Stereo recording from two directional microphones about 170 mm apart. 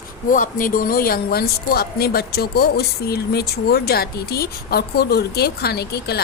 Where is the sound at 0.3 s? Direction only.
55° left (ahead or behind).